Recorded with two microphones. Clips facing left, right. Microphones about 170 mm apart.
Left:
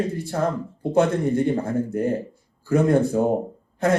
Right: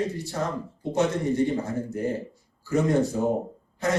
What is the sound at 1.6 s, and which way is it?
A man's voice, 55° left (ahead or behind).